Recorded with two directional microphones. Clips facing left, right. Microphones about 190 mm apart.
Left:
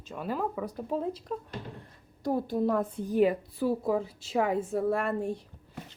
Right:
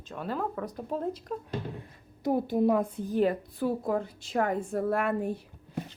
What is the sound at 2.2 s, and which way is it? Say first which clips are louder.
Speech: right 3 dB; 20° right (ahead or behind).